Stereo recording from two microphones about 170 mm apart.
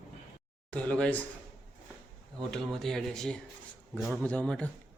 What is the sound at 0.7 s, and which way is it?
Speech, 10° left (ahead or behind).